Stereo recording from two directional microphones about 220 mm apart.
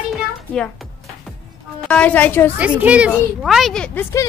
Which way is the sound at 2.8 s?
5° right (ahead or behind).